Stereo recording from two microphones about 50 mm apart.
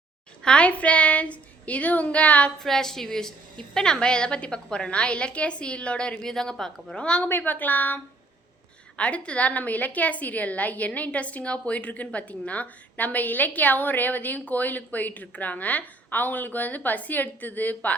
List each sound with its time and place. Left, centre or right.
0.4 s a woman's voice: left
2.6 s a woman's voice: centre
6.2 s speech: centre
6.9 s a woman's voice: centre
7.4 s a woman's voice: left
9.0 s a woman's voice: left